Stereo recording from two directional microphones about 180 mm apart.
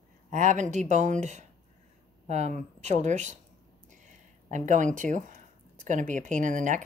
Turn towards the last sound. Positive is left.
turn(degrees=-45)  # may be behind; listen again after turning